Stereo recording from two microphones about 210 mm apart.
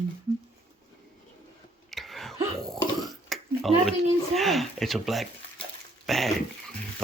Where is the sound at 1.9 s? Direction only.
Centre (ahead or behind).